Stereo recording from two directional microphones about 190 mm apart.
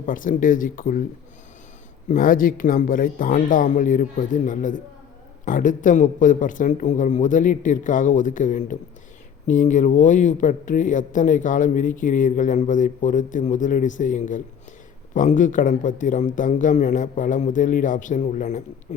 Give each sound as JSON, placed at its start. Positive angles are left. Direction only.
{"t": 0.0, "sound": "a man's voice", "side_deg": 45}
{"t": 2.0, "sound": "a man's voice", "side_deg": 45}